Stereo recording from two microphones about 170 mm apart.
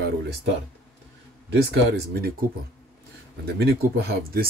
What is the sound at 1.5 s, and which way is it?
Speech, 75° right (ahead or behind).